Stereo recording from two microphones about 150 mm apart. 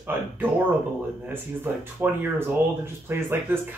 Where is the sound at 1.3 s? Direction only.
15° right (ahead or behind).